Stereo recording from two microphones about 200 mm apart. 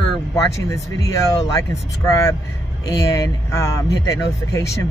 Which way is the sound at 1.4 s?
20° left (ahead or behind).